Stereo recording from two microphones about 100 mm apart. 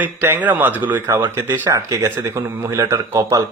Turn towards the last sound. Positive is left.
turn(degrees=-30)  # may be behind; listen again after turning